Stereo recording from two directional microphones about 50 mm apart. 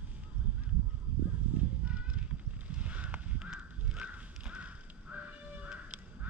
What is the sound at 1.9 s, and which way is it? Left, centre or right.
Honk, right.